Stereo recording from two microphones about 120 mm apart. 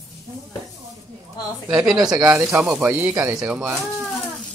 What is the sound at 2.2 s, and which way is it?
Speech, 20° right (ahead or behind).